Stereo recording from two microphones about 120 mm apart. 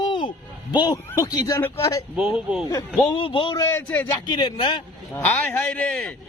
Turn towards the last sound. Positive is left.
turn(degrees=10)  # may be behind; listen again after turning